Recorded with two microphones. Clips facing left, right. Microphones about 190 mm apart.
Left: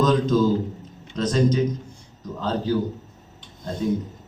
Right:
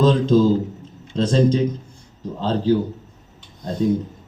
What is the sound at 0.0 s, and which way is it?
A man's voice, 30° right (ahead or behind).